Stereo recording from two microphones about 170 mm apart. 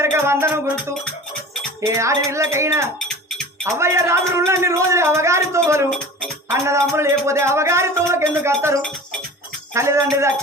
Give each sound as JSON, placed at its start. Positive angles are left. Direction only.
{"t": 0.0, "sound": "music", "side_deg": -15}
{"t": 1.8, "sound": "speech", "side_deg": -15}
{"t": 9.7, "sound": "speech", "side_deg": -15}